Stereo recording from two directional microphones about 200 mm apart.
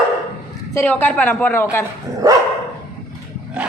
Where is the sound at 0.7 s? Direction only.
10° left (ahead or behind).